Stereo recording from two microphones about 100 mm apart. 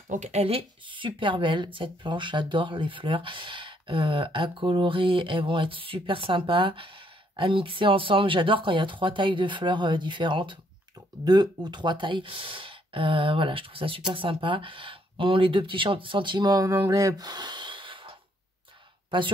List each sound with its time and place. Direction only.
0.3 s speech: 80° right; by 19.3 s 55° right (ahead or behind)